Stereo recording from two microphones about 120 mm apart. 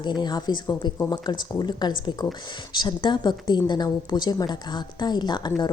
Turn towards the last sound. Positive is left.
turn(degrees=40)  # may be behind; listen again after turning